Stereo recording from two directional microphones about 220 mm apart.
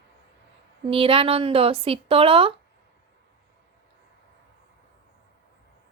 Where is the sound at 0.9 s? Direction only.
25° right (ahead or behind).